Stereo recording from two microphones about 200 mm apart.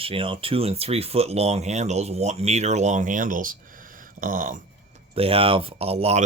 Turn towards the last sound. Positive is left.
turn(degrees=-30)  # may be behind; listen again after turning